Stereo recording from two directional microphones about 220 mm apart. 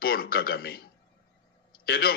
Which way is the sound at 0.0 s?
45° left (ahead or behind).